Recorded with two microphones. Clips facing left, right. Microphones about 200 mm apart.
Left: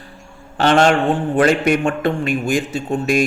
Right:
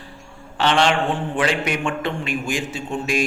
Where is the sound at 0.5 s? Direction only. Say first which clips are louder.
Left 5 dB; 45° left (ahead or behind).